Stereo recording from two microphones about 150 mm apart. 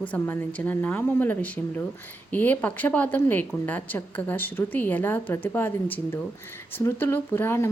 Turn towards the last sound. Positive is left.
turn(degrees=15)  # may be behind; listen again after turning